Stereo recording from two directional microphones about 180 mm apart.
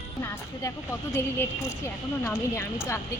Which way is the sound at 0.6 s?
15° left (ahead or behind).